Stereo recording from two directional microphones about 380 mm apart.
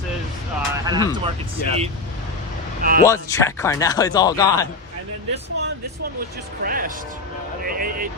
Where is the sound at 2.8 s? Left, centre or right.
Right.